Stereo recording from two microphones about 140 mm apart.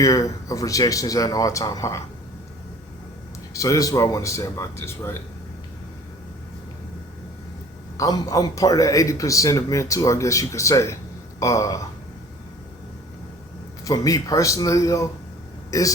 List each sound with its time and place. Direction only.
0.0 s a man's voice: 25° left (ahead or behind)
3.5 s a man's voice: 25° left (ahead or behind)
7.9 s a man's voice: 25° left (ahead or behind)
13.8 s a man's voice: 25° left (ahead or behind)